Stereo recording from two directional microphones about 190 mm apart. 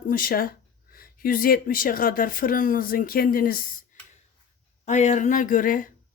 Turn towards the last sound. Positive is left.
turn(degrees=45)  # may be behind; listen again after turning